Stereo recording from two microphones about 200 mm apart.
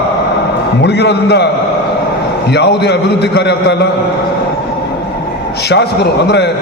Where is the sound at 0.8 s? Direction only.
60° left (ahead or behind).